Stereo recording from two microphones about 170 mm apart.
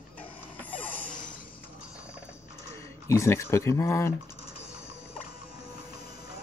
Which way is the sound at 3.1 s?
15° left (ahead or behind).